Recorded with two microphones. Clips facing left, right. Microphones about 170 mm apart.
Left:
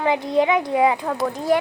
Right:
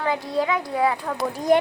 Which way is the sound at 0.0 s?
20° left (ahead or behind).